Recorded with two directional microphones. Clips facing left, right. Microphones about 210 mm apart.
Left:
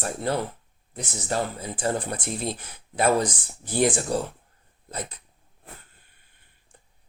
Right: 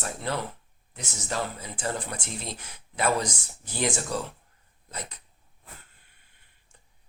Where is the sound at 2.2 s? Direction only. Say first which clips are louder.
Left 7 dB; 55° left (ahead or behind).